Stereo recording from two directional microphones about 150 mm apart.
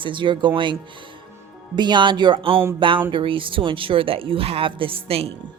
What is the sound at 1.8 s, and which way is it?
Speech, 30° right (ahead or behind).